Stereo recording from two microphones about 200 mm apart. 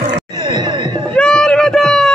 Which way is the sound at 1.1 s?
5° left (ahead or behind).